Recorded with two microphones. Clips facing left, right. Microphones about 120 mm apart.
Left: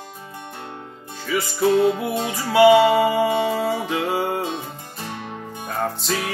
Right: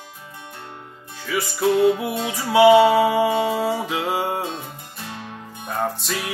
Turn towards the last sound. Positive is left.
turn(degrees=0)  # may be behind; listen again after turning